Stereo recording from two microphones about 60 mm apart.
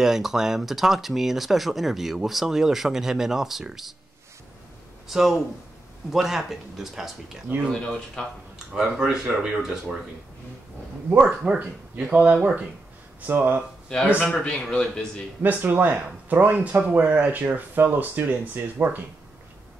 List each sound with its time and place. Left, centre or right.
0.0 s speech: centre
5.0 s speech: centre
7.5 s speech: right
8.2 s speech: centre
8.7 s speech: centre
11.1 s speech: right
14.3 s speech: centre
15.4 s speech: right